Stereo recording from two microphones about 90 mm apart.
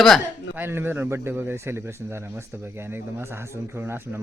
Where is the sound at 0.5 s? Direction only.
25° right (ahead or behind).